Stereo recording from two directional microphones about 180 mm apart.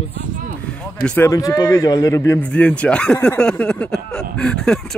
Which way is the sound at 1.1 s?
15° left (ahead or behind).